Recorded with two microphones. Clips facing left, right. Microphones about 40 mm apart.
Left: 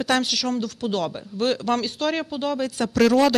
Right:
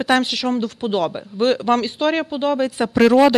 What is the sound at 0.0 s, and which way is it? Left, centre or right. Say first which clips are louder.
Speech: right 4 dB; centre.